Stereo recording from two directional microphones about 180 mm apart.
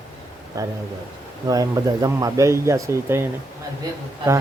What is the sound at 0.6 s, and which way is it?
A man's voice, 20° right (ahead or behind).